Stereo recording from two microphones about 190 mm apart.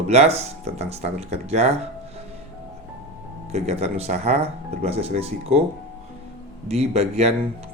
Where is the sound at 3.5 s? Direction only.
35° right (ahead or behind).